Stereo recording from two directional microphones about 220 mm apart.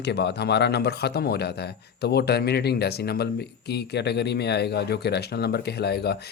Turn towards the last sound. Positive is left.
turn(degrees=45)  # may be behind; listen again after turning